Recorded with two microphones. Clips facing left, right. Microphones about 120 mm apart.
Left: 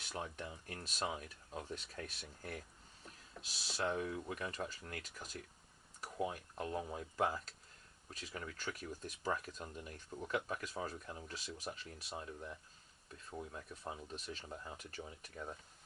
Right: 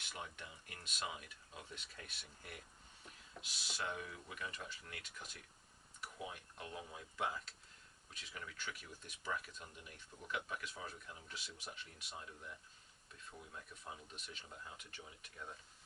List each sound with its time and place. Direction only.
0.1 s speech: 40° left (ahead or behind)
3.7 s speech: 35° left (ahead or behind)